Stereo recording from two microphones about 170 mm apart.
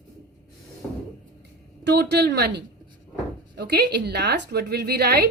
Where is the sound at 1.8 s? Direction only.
80° right.